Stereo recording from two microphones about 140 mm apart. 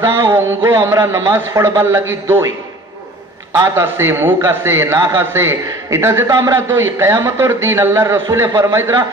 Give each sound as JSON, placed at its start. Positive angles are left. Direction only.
{"t": 0.1, "sound": "a man's voice", "side_deg": -25}
{"t": 3.5, "sound": "a man's voice", "side_deg": -20}